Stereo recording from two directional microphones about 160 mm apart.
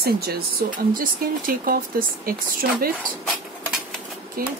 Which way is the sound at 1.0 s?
65° right (ahead or behind).